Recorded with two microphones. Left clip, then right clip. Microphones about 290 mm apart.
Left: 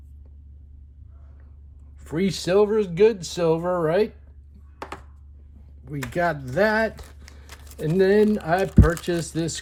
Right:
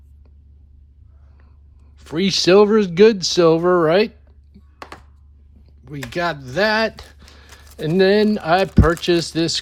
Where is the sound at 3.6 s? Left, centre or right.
Right.